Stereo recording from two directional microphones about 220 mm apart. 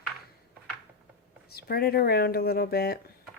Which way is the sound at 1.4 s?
45° left (ahead or behind).